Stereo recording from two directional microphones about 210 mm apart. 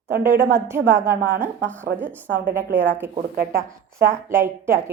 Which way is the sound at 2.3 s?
50° right (ahead or behind).